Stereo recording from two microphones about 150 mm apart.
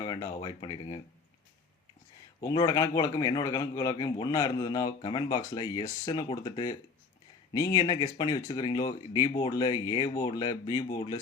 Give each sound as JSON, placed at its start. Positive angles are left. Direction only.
{"t": 0.0, "sound": "a sound", "side_deg": 25}
{"t": 0.3, "sound": "speech", "side_deg": 30}
{"t": 2.4, "sound": "a man's voice", "side_deg": 25}